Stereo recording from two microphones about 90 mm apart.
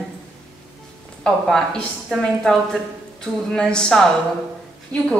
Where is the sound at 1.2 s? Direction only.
5° left (ahead or behind).